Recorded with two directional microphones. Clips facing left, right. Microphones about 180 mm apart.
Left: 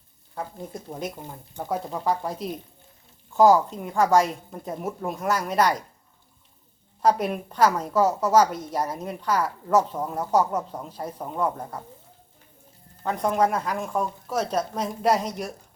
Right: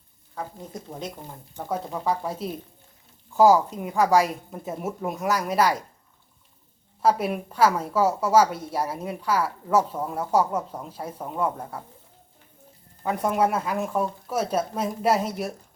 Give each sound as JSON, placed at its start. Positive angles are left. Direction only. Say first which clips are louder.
{"t": 1.5, "sound": "a woman's voice", "louder": "left 1 dB", "side_deg": 0}
{"t": 7.0, "sound": "a woman's voice", "louder": "even", "side_deg": -5}
{"t": 13.0, "sound": "a woman's voice", "louder": "even", "side_deg": -5}